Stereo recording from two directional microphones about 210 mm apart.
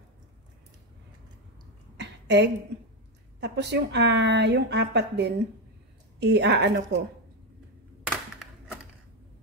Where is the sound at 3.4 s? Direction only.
55° right (ahead or behind).